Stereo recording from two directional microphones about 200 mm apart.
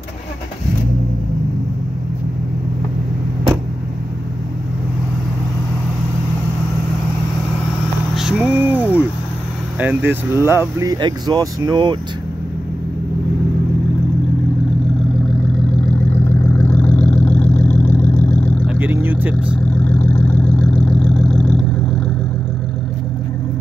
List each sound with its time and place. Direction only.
8.1 s vehicle: 5° right (ahead or behind)
9.8 s speech: 10° right (ahead or behind)
16.1 s vehicle: 10° left (ahead or behind)
18.7 s vehicle: 10° right (ahead or behind)
19.7 s vehicle: 10° left (ahead or behind)